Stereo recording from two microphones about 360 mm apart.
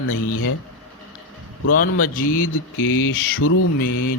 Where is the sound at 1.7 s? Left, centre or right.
Left.